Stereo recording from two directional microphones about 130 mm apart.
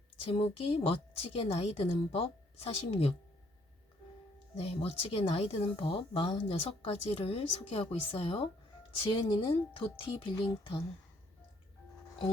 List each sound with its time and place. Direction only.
0.3 s speech: 50° left (ahead or behind)
4.5 s a woman's voice: 50° left (ahead or behind)